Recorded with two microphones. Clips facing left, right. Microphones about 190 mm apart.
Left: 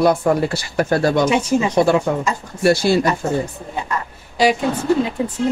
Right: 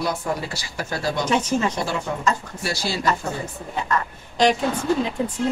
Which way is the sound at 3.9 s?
10° left (ahead or behind).